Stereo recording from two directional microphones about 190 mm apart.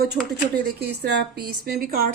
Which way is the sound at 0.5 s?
60° right (ahead or behind).